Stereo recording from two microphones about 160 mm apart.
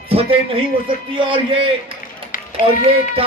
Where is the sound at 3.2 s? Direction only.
35° right (ahead or behind).